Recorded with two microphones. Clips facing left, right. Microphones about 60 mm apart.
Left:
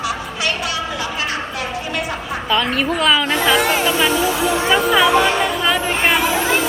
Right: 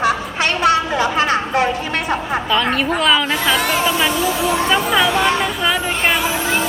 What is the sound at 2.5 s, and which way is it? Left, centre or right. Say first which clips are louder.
A woman's voice: even; centre.